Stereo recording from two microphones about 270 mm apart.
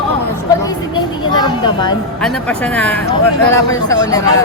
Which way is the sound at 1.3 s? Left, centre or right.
Centre.